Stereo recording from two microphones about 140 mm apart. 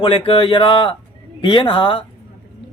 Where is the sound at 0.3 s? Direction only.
40° left (ahead or behind).